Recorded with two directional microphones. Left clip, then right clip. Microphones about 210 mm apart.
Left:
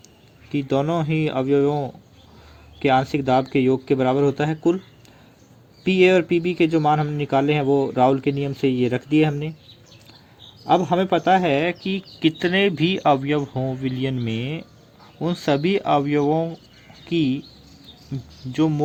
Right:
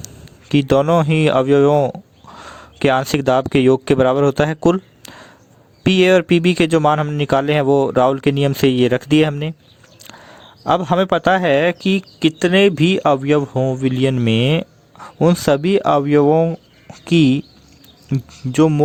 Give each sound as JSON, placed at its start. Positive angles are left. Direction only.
{"t": 0.0, "sound": "speech", "side_deg": -50}
{"t": 10.7, "sound": "a man's voice", "side_deg": -50}